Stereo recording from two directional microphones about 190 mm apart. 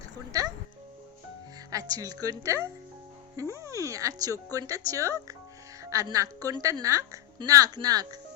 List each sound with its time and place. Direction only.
0.3 s a woman's voice: 20° right (ahead or behind)
1.7 s a woman's voice: 20° right (ahead or behind)